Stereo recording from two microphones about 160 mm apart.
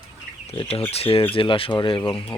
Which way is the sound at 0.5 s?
35° left (ahead or behind).